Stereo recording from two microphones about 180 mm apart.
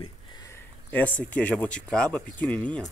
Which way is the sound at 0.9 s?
10° left (ahead or behind).